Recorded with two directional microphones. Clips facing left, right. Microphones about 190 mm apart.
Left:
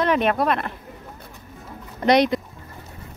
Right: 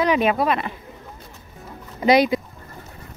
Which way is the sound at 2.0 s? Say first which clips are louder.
Right 1 dB; 5° right (ahead or behind).